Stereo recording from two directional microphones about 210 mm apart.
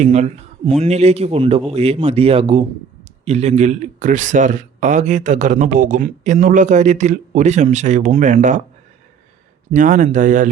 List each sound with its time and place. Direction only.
0.0 s speech: 35° right (ahead or behind)
9.7 s speech: 40° right (ahead or behind)